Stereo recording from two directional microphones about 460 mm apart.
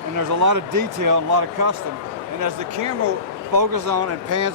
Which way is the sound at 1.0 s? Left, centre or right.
Right.